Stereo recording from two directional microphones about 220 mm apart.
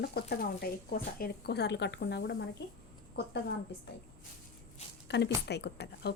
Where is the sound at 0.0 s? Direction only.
45° left (ahead or behind).